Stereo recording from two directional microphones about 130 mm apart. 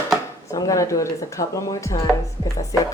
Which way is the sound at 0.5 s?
25° left (ahead or behind).